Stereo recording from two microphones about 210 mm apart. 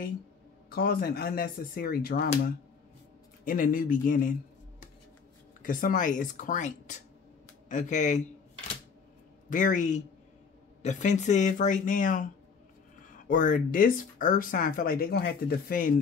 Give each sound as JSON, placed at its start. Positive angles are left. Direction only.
{"t": 0.7, "sound": "speech", "side_deg": 45}
{"t": 3.4, "sound": "speech", "side_deg": 40}
{"t": 5.6, "sound": "speech", "side_deg": 40}
{"t": 9.5, "sound": "speech", "side_deg": 40}
{"t": 13.3, "sound": "speech", "side_deg": 40}